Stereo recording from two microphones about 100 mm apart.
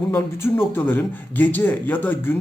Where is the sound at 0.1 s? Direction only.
20° left (ahead or behind).